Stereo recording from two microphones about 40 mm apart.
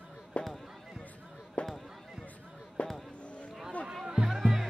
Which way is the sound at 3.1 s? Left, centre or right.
Left.